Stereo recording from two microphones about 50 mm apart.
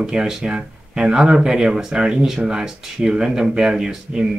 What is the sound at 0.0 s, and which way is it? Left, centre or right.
Speech, centre.